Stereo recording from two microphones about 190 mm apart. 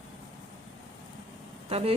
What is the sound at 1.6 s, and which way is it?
Speech, 30° right (ahead or behind).